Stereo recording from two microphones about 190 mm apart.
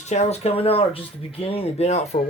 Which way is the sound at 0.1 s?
35° left (ahead or behind).